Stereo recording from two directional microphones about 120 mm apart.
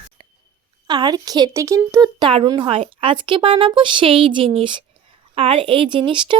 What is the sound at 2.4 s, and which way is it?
A woman's voice, 45° right (ahead or behind).